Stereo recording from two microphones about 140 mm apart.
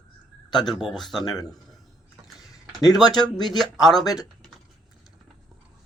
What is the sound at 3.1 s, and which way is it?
Speech, 30° left (ahead or behind).